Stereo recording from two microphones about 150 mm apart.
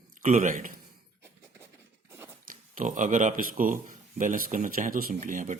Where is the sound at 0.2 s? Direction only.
60° right (ahead or behind).